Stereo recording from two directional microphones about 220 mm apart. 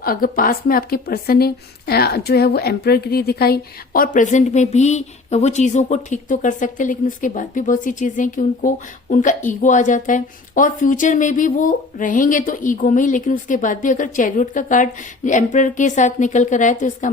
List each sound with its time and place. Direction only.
0.0 s a woman's voice: 40° left (ahead or behind)